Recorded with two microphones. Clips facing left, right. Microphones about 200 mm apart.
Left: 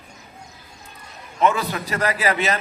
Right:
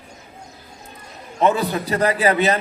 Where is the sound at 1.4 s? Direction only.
35° right (ahead or behind).